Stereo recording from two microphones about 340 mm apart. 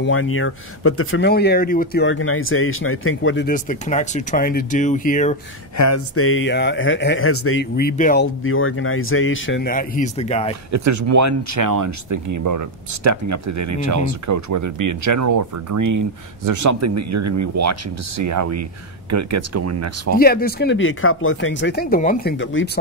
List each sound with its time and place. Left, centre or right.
0.0 s speech: left
5.8 s speech: left; by 10.5 s centre
10.7 s speech: right
20.2 s speech: left